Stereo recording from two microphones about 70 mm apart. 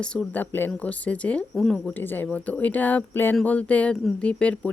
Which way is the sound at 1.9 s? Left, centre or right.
Left.